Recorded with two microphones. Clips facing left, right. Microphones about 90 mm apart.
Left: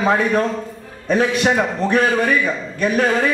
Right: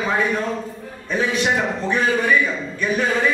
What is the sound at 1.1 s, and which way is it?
Speech, 60° left (ahead or behind).